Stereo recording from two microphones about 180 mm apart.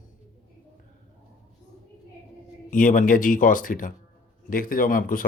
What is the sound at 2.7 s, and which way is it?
Speech, 45° left (ahead or behind).